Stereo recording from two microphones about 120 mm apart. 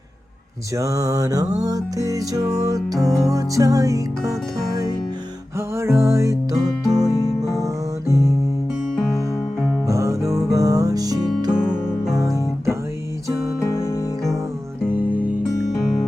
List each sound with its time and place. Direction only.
0.8 s music: 30° right (ahead or behind)
7.0 s music: 25° left (ahead or behind)
9.8 s music: 25° right (ahead or behind)
11.5 s music: 5° right (ahead or behind)
12.2 s guitar: 25° right (ahead or behind)
13.7 s music: 25° left (ahead or behind)
14.8 s music: 15° right (ahead or behind)